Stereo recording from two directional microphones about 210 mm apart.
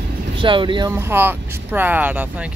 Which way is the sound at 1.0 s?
10° right (ahead or behind).